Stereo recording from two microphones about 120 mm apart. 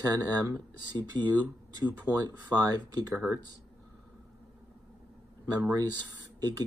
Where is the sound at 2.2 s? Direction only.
30° right (ahead or behind).